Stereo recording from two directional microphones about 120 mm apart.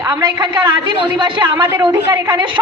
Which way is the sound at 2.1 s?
40° right (ahead or behind).